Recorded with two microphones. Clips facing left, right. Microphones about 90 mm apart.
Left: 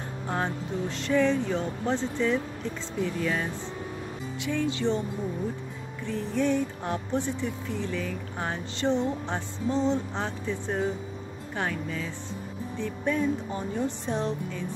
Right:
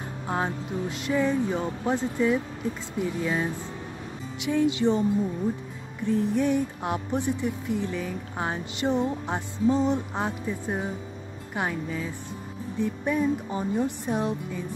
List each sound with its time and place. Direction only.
0.3 s speech: 15° right (ahead or behind)
6.0 s speech: 15° right (ahead or behind)